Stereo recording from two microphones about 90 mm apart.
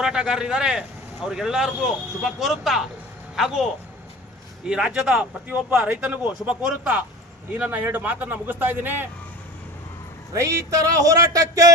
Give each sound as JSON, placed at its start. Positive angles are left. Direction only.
{"t": 0.0, "sound": "a woman's voice", "side_deg": -10}
{"t": 10.3, "sound": "speech", "side_deg": -35}